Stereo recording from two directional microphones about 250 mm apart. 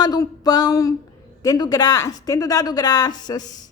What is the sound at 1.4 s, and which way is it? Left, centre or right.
A woman's voice, centre.